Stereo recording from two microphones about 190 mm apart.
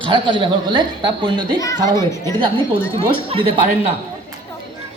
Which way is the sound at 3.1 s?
25° right (ahead or behind).